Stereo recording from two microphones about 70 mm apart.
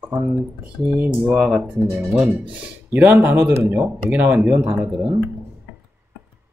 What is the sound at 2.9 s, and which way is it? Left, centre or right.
Speech, right.